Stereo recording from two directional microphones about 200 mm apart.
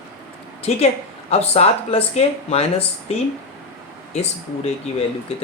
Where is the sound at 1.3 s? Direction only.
30° left (ahead or behind).